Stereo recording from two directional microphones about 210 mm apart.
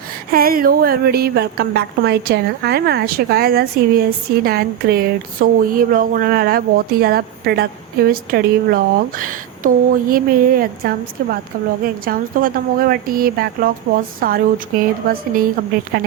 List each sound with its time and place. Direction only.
0.3 s speech: 45° right (ahead or behind)
13.9 s a woman's voice: 65° right (ahead or behind)
14.2 s speech: 45° right (ahead or behind)